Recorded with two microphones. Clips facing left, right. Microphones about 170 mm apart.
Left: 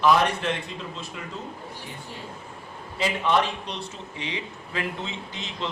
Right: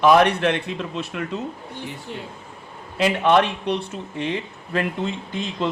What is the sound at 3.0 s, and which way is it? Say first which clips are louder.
Speech: right 6 dB; 65° right (ahead or behind).